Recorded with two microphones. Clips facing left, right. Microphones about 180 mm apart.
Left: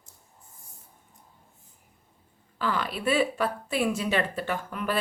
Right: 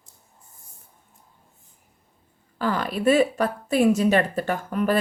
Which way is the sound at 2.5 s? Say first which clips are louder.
Right 4 dB; 45° right (ahead or behind).